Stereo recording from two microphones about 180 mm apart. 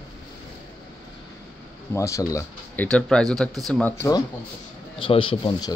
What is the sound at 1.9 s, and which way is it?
Speech, 15° left (ahead or behind).